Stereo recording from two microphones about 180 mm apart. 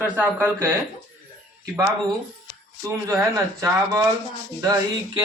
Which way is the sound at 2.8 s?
15° right (ahead or behind).